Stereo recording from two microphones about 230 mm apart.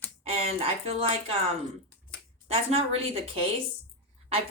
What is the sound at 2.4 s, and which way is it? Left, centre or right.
Speech, right.